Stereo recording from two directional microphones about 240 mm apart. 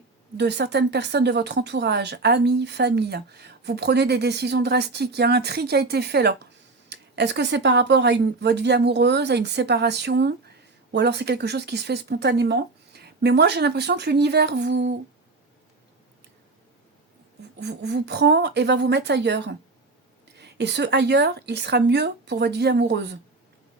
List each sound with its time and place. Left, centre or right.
0.3 s speech: right
17.6 s speech: right